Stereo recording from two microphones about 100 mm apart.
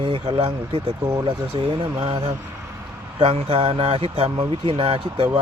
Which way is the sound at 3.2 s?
70° right (ahead or behind).